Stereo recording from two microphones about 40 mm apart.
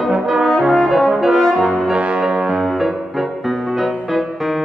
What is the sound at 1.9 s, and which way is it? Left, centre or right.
Brass instrument, right.